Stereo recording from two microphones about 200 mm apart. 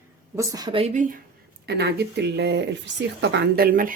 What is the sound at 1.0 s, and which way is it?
Speech, 40° right (ahead or behind).